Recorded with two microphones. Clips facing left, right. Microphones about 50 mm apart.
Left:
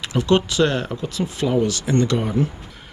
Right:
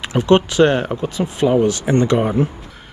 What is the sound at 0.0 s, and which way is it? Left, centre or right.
Speech, right.